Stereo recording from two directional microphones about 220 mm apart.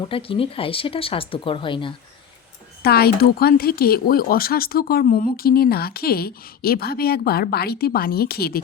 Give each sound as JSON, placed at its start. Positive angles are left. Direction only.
{"t": 0.1, "sound": "speech", "side_deg": 25}
{"t": 2.8, "sound": "speech", "side_deg": 45}